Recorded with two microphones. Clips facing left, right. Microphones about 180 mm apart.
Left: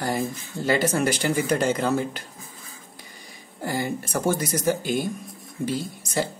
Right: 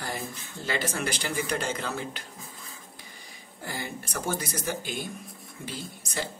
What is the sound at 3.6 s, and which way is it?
Speech, 45° left (ahead or behind).